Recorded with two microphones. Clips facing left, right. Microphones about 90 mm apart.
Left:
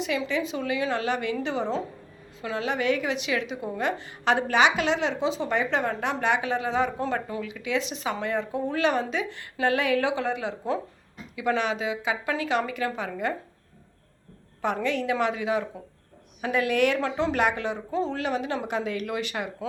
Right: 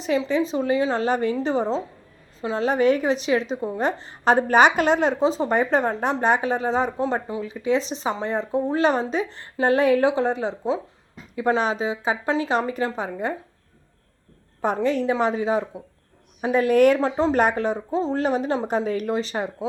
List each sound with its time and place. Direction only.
0.0 s a woman's voice: 35° right (ahead or behind)
7.0 s speech: 20° right (ahead or behind)
7.4 s a woman's voice: 35° right (ahead or behind)
14.6 s a woman's voice: 35° right (ahead or behind)